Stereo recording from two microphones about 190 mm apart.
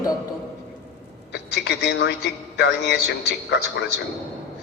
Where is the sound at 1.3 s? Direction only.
60° left (ahead or behind).